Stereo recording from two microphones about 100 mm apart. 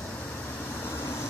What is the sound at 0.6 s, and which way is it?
Vehicle, 25° left (ahead or behind).